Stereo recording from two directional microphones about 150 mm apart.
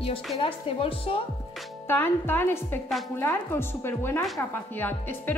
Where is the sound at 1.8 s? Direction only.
15° left (ahead or behind).